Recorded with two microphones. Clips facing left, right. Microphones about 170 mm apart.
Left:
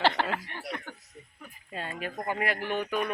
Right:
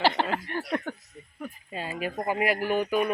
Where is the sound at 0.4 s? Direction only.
55° right (ahead or behind).